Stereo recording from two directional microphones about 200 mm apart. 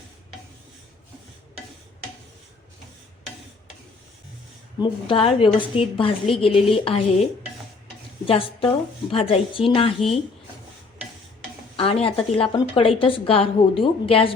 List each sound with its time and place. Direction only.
4.8 s a woman's voice: 25° left (ahead or behind)
11.8 s a woman's voice: 25° left (ahead or behind)